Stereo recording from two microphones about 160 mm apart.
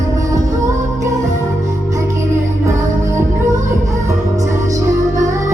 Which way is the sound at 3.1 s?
20° right (ahead or behind).